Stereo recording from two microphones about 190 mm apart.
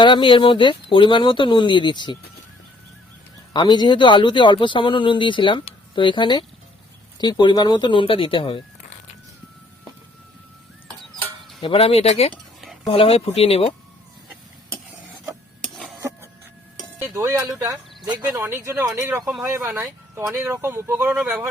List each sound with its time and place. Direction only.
0.0 s speech: 25° left (ahead or behind)
3.5 s speech: 25° left (ahead or behind)
11.6 s speech: 30° left (ahead or behind)
15.6 s a sound: centre (ahead or behind)
17.0 s cowbell: 15° right (ahead or behind)
18.0 s speech: 10° right (ahead or behind)